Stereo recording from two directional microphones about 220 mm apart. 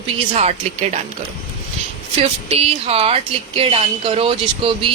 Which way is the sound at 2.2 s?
25° right (ahead or behind).